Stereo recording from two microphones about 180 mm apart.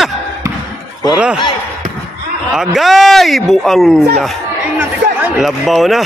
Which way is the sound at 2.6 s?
Centre (ahead or behind).